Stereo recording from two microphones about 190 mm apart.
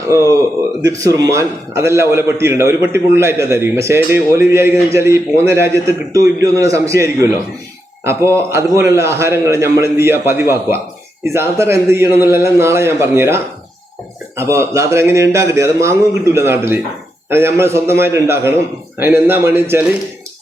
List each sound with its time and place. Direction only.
0.1 s a man's voice: 15° right (ahead or behind)